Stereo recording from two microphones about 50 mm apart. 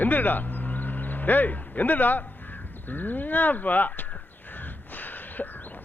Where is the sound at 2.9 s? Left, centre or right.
Left.